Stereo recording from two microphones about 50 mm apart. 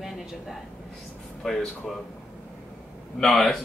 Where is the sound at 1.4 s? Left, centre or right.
Centre.